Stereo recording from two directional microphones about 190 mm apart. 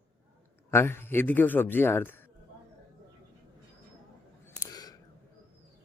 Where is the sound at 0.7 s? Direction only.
10° left (ahead or behind).